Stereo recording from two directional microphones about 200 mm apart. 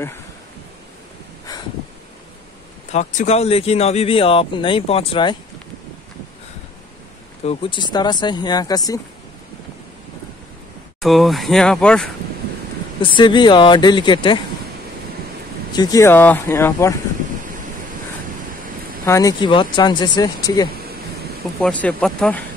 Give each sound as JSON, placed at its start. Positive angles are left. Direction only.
{"t": 2.9, "sound": "speech", "side_deg": 35}
{"t": 7.4, "sound": "speech", "side_deg": 25}
{"t": 11.0, "sound": "speech", "side_deg": 0}
{"t": 13.0, "sound": "speech", "side_deg": 25}
{"t": 15.7, "sound": "speech", "side_deg": 20}
{"t": 19.0, "sound": "speech", "side_deg": 15}
{"t": 21.5, "sound": "speech", "side_deg": 5}